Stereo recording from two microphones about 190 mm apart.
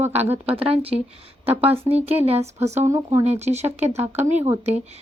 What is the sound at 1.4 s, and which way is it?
Speech, 10° right (ahead or behind).